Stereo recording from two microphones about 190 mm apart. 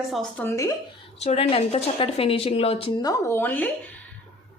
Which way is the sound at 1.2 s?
30° left (ahead or behind).